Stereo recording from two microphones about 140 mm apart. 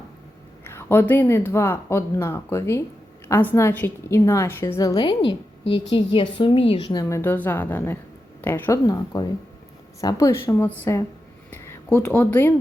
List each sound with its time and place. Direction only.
0.6 s a woman's voice: 15° left (ahead or behind); by 6.8 s 40° left (ahead or behind)
6.8 s a woman's voice: 25° left (ahead or behind)
8.8 s a woman's voice: 30° left (ahead or behind)
11.5 s a sound: 20° left (ahead or behind)
12.0 s speech: 10° left (ahead or behind)